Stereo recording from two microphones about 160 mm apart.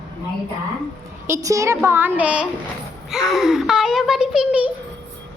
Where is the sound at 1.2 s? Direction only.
20° right (ahead or behind).